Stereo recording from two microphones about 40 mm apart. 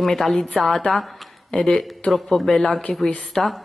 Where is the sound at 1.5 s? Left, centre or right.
Left.